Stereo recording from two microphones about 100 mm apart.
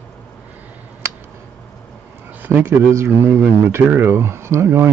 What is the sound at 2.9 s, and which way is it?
Speech, 25° right (ahead or behind).